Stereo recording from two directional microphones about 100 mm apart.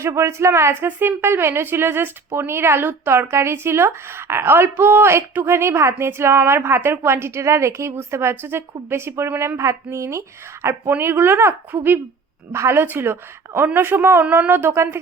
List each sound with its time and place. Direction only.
0.0 s speech: 30° right (ahead or behind)